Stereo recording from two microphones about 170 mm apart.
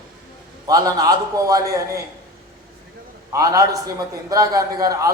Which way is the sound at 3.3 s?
20° right (ahead or behind).